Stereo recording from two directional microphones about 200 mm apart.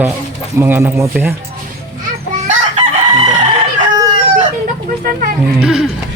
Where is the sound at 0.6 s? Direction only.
10° right (ahead or behind).